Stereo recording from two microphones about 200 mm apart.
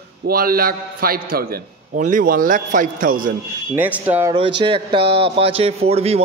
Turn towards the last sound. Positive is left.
turn(degrees=-30)  # may be behind; listen again after turning